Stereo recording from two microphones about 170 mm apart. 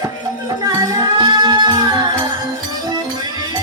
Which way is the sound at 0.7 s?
20° right (ahead or behind).